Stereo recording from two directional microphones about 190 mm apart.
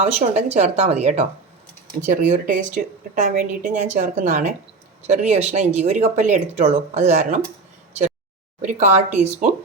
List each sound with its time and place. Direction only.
0.0 s speech: 35° right (ahead or behind)
8.6 s speech: 35° right (ahead or behind)